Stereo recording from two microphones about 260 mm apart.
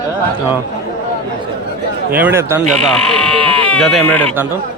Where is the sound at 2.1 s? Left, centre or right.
Centre.